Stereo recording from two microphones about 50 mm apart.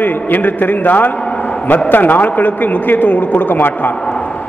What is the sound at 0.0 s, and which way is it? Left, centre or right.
A man's voice, left.